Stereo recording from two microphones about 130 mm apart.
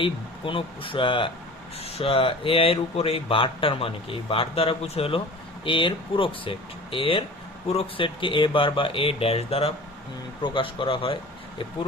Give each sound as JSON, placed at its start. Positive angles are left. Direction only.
{"t": 0.0, "sound": "speech", "side_deg": 40}